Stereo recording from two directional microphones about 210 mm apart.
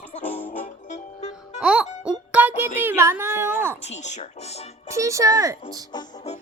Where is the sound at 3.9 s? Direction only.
35° left (ahead or behind).